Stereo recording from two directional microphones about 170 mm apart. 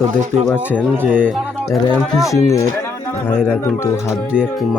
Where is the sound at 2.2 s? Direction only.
15° left (ahead or behind).